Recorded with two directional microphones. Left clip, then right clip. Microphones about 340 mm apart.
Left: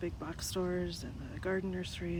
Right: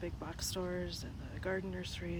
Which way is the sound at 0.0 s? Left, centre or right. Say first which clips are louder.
Left 2 dB; centre.